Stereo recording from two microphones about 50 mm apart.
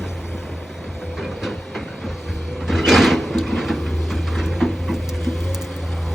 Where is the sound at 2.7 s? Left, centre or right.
Centre.